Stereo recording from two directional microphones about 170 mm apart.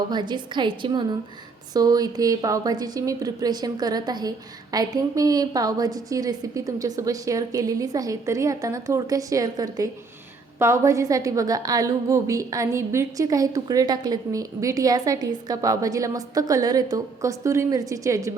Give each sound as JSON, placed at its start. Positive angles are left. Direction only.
{"t": 0.1, "sound": "a woman's voice", "side_deg": -25}